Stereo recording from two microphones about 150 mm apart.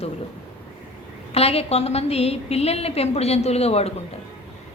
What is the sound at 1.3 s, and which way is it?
A woman's voice, 40° left (ahead or behind).